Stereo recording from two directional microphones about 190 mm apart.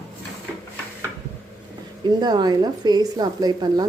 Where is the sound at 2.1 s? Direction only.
20° right (ahead or behind).